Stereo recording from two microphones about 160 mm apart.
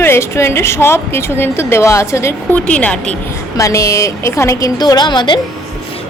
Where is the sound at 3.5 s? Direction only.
20° left (ahead or behind).